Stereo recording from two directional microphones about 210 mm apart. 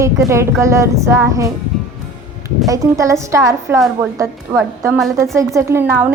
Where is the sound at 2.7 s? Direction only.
15° right (ahead or behind).